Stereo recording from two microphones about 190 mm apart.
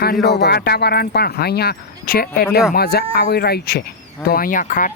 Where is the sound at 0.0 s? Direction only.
55° left (ahead or behind).